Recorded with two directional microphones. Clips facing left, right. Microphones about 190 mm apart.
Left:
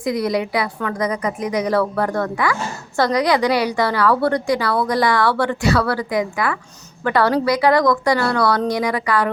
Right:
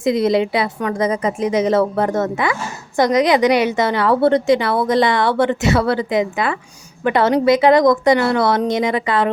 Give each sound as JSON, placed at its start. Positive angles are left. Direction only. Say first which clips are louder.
{"t": 0.0, "sound": "a woman's voice", "louder": "right 5 dB", "side_deg": -25}